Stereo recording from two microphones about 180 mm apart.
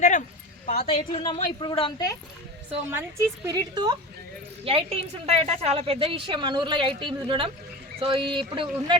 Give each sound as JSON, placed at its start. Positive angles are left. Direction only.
{"t": 0.8, "sound": "a woman's voice", "side_deg": 35}
{"t": 2.9, "sound": "a woman's voice", "side_deg": -15}